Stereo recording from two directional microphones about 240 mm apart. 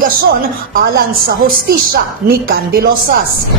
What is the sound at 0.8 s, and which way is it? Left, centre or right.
A man's voice, right.